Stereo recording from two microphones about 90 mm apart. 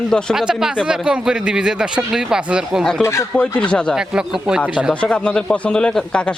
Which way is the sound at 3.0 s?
35° left (ahead or behind).